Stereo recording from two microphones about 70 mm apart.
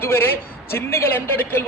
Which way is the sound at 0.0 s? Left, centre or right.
Left.